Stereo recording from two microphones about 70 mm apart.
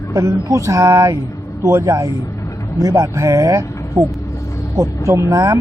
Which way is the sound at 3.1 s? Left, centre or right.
Right.